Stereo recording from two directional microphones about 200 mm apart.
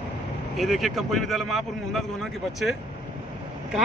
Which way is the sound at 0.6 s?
Centre (ahead or behind).